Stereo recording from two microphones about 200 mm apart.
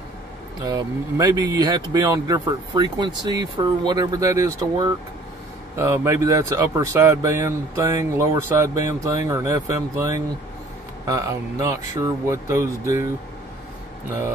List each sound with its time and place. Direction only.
0.7 s speech: 20° right (ahead or behind)